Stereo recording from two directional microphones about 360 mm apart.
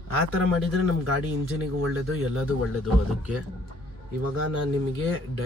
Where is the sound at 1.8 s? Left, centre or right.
Right.